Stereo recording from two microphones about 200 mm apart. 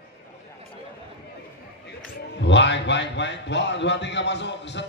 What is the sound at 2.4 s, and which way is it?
A man's voice, 60° left (ahead or behind).